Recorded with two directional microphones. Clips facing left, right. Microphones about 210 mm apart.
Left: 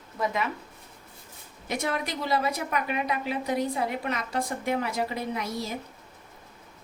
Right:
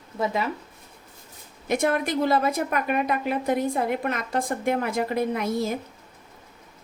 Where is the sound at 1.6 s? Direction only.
55° right (ahead or behind).